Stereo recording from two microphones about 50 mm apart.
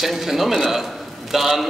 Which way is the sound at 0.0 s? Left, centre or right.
Centre.